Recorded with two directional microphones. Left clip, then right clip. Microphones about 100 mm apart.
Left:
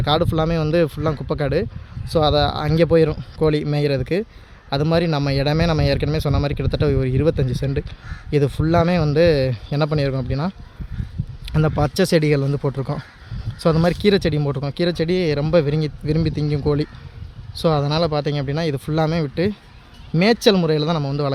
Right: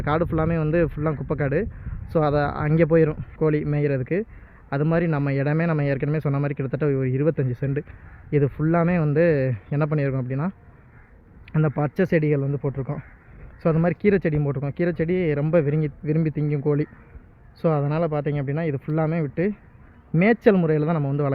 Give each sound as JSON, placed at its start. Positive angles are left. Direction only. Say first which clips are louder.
{"t": 0.0, "sound": "speech", "louder": "left 4 dB", "side_deg": 25}
{"t": 3.2, "sound": "speech", "louder": "left 3 dB", "side_deg": 40}
{"t": 12.4, "sound": "speech", "louder": "left 4 dB", "side_deg": 85}
{"t": 13.6, "sound": "speech", "louder": "left 4 dB", "side_deg": 50}
{"t": 20.1, "sound": "speech", "louder": "left 3 dB", "side_deg": 30}